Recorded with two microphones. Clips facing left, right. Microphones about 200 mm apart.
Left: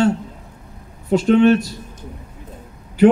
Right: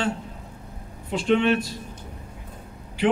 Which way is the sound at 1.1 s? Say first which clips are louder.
Left 8 dB; 40° left (ahead or behind).